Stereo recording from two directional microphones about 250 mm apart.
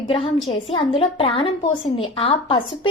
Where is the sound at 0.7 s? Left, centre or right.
Left.